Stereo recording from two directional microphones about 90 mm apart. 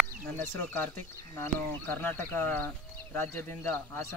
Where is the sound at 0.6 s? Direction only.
20° left (ahead or behind).